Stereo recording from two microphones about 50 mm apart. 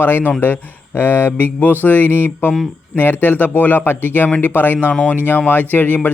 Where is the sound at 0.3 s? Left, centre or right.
Left.